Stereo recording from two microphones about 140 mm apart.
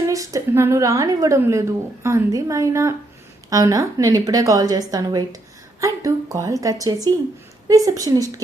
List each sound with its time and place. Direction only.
0.1 s a woman's voice: 25° right (ahead or behind)